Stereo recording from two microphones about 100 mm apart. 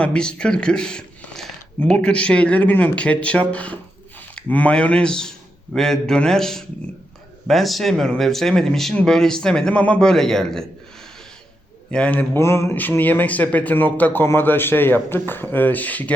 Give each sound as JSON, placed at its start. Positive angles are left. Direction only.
{"t": 0.0, "sound": "speech", "side_deg": 10}
{"t": 11.9, "sound": "speech", "side_deg": 10}
{"t": 12.4, "sound": "speech", "side_deg": 25}